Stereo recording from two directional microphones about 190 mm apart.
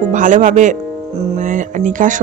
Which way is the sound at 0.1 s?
40° right (ahead or behind).